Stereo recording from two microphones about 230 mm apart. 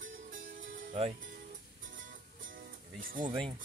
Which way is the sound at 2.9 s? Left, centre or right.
Right.